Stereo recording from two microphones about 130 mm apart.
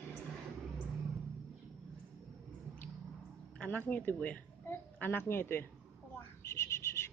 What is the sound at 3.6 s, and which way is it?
A woman's voice, 10° left (ahead or behind).